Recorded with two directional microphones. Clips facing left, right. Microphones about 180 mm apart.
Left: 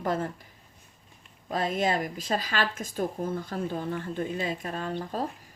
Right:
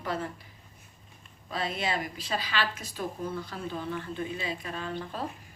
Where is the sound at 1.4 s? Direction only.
45° left (ahead or behind).